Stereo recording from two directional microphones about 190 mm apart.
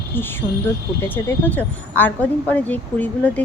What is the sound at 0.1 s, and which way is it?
Speech, 10° left (ahead or behind).